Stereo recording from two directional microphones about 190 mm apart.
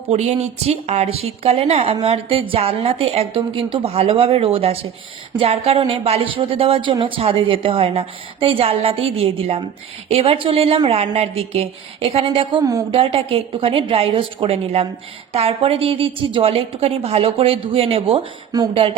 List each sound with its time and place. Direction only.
0.1 s a woman's voice: 35° right (ahead or behind); by 13.0 s 20° right (ahead or behind)
13.0 s a woman's voice: 30° right (ahead or behind)